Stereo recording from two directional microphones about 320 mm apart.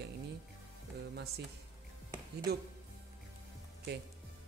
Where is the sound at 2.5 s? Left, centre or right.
Right.